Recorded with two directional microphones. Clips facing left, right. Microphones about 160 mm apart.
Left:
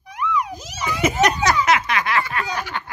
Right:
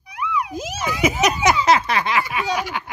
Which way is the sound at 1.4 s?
20° right (ahead or behind).